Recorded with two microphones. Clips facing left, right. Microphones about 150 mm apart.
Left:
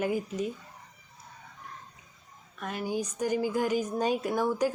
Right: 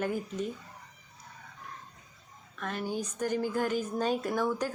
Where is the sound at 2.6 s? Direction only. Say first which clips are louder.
Left 2 dB; 10° left (ahead or behind).